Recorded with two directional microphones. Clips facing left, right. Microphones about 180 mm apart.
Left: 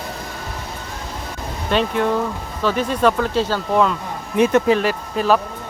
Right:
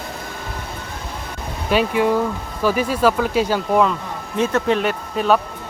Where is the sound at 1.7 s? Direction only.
5° right (ahead or behind).